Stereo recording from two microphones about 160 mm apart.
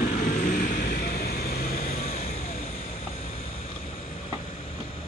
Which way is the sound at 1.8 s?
45° left (ahead or behind).